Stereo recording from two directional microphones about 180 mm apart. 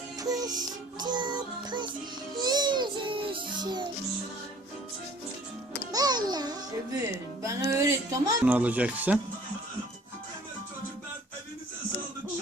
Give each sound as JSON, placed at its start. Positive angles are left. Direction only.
{"t": 0.2, "sound": "music", "side_deg": -20}
{"t": 2.4, "sound": "child singing", "side_deg": -25}
{"t": 5.9, "sound": "music", "side_deg": -20}
{"t": 7.4, "sound": "speech", "side_deg": -20}